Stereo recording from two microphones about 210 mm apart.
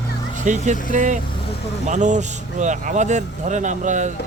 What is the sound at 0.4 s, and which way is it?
Speech, 35° right (ahead or behind).